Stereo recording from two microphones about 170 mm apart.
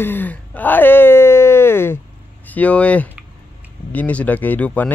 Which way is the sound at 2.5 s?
10° left (ahead or behind).